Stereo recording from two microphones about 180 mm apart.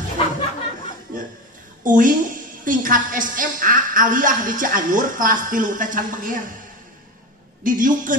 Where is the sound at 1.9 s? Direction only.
50° right (ahead or behind).